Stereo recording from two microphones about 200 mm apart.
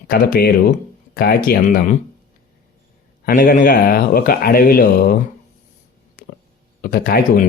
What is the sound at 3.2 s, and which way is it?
Speech, 40° left (ahead or behind).